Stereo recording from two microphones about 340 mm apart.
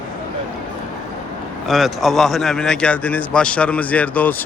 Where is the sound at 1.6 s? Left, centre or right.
Centre.